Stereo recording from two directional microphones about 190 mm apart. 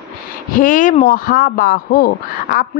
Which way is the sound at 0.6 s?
45° left (ahead or behind).